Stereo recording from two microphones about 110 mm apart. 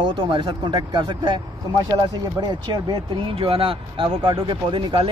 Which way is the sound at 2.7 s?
50° right (ahead or behind).